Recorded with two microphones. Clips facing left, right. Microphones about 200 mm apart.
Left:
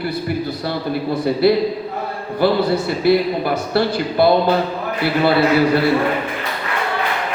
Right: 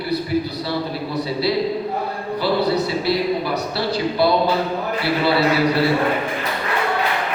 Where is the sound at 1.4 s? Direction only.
50° left (ahead or behind).